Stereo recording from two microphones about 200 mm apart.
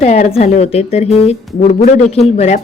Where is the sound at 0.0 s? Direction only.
35° left (ahead or behind).